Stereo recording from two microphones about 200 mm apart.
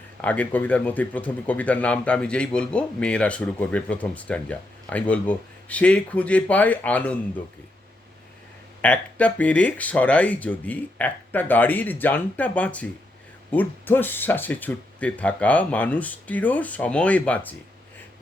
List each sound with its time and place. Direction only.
0.2 s speech: 5° left (ahead or behind)
8.8 s speech: 5° left (ahead or behind)